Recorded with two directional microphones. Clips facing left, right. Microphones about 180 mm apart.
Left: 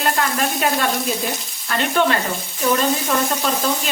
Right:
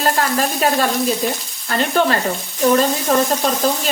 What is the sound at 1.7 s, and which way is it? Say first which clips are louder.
A woman's voice: right 2 dB; 35° right (ahead or behind).